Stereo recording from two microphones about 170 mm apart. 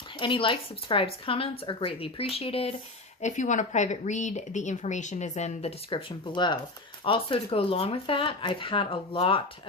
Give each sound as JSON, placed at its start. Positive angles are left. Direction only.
{"t": 0.2, "sound": "speech", "side_deg": 30}